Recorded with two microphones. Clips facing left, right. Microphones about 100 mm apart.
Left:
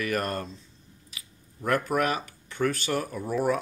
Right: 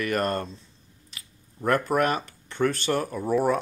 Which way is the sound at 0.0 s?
5° left (ahead or behind).